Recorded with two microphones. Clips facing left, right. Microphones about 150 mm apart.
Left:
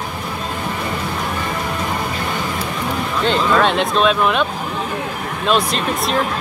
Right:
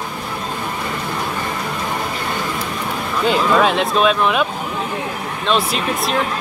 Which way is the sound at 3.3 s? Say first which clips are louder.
Right 1 dB; 5° right (ahead or behind).